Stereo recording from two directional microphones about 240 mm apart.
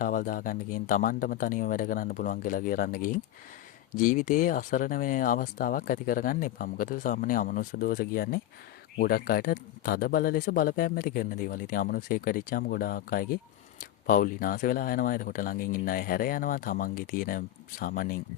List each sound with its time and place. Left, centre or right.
0.0 s speech: left